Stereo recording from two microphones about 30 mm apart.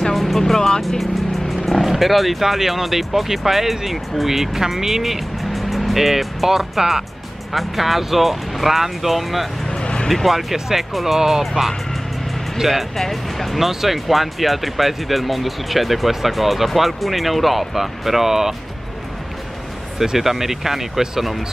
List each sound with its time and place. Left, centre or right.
0.1 s vehicle: centre
0.4 s speech: centre
1.9 s speech: centre
9.7 s music: left
10.0 s speech: centre
10.3 s speech: centre
20.2 s speech: centre